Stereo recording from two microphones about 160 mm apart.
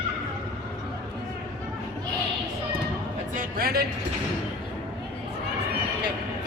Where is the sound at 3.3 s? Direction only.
65° right (ahead or behind).